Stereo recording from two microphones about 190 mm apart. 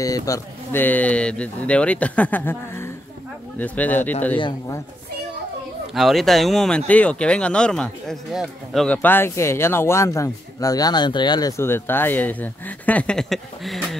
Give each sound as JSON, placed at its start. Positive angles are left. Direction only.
{"t": 0.0, "sound": "speech", "side_deg": 15}
{"t": 4.4, "sound": "speech", "side_deg": 25}
{"t": 5.9, "sound": "speech", "side_deg": 0}